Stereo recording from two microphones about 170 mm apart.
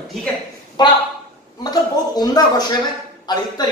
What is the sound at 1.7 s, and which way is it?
A woman's voice, 25° left (ahead or behind).